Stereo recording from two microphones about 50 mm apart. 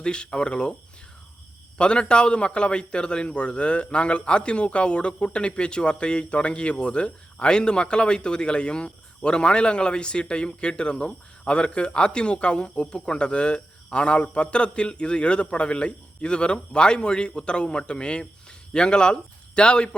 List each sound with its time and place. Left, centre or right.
0.0 s a man's voice: centre
1.8 s a man's voice: centre